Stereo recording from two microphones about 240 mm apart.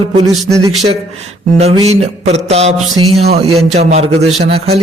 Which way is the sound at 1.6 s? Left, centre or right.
Right.